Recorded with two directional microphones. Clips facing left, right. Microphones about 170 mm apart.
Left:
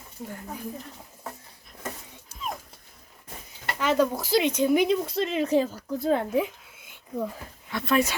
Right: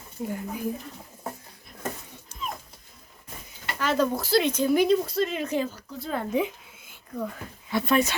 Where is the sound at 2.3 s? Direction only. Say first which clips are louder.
Right 4 dB; 5° left (ahead or behind).